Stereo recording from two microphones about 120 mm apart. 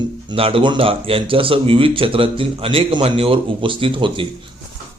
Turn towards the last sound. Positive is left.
turn(degrees=-45)  # may be behind; listen again after turning